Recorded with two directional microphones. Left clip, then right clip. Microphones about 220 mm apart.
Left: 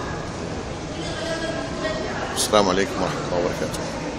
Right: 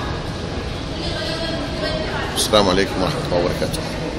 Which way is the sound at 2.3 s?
15° left (ahead or behind).